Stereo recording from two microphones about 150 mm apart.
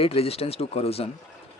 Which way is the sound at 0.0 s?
40° left (ahead or behind).